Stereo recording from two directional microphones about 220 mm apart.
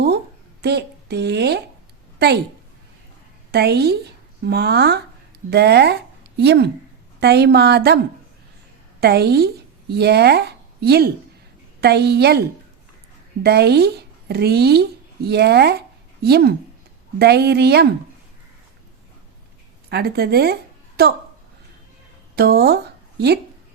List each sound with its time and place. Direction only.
0.6 s a woman's voice: 50° right (ahead or behind)
3.5 s speech: 50° right (ahead or behind)
9.0 s speech: 45° right (ahead or behind)
13.4 s speech: 45° right (ahead or behind)
19.9 s a woman's voice: 45° right (ahead or behind)
22.4 s speech: 45° right (ahead or behind)